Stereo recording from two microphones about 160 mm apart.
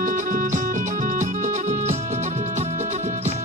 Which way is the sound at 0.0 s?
55° right (ahead or behind).